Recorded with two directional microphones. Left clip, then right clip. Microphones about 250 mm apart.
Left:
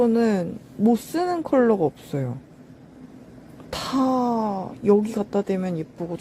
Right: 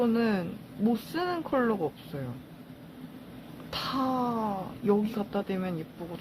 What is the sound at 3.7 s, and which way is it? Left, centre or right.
Speech, left.